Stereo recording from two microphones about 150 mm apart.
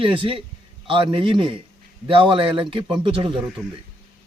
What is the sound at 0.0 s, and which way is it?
Speech, 35° right (ahead or behind).